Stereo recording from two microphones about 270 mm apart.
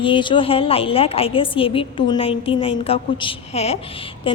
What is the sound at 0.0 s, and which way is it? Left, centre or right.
A woman's voice, centre.